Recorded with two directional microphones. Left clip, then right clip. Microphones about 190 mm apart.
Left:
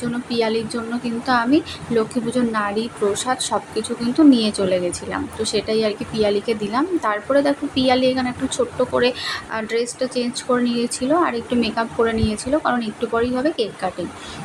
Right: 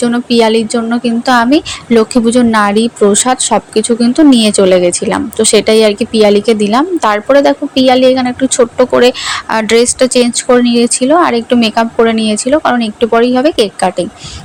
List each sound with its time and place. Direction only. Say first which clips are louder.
0.0 s a woman's voice: right 12 dB; 40° right (ahead or behind)